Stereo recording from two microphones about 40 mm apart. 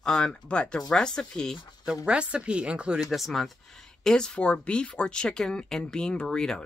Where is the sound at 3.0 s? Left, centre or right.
Centre.